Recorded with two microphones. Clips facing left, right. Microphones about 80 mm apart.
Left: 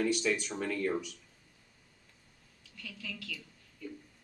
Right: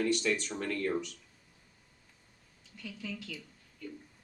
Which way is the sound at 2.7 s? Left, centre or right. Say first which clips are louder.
Right 3 dB; centre.